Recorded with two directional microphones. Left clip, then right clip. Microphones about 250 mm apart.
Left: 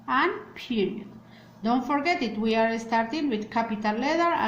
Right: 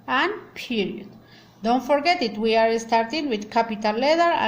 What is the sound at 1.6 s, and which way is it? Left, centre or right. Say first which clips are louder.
A woman's voice: right 5 dB; right.